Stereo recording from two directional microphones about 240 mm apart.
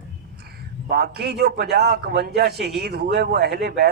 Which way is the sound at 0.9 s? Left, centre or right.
Right.